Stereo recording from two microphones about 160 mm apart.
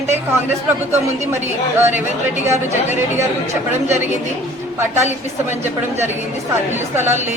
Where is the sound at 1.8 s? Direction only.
15° right (ahead or behind).